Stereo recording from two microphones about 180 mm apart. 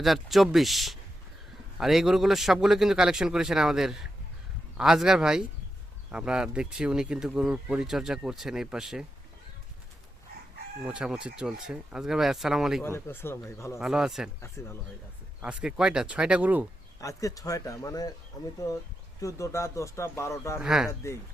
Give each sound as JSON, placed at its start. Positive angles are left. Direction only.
{"t": 0.0, "sound": "speech", "side_deg": 0}
{"t": 10.8, "sound": "speech", "side_deg": -5}
{"t": 12.8, "sound": "speech", "side_deg": 10}
{"t": 13.7, "sound": "speech", "side_deg": 0}
{"t": 14.4, "sound": "speech", "side_deg": 15}
{"t": 15.4, "sound": "speech", "side_deg": -5}
{"t": 17.0, "sound": "speech", "side_deg": 20}
{"t": 20.6, "sound": "speech", "side_deg": -5}